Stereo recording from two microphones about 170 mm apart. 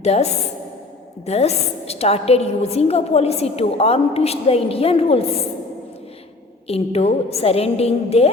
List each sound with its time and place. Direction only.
0.0 s a woman's voice: 40° left (ahead or behind)
6.7 s a woman's voice: 35° left (ahead or behind)